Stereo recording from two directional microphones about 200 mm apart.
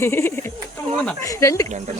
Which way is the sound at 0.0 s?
10° left (ahead or behind).